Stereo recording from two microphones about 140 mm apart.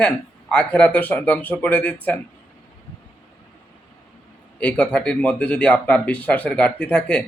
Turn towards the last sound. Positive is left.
turn(degrees=5)  # may be behind; listen again after turning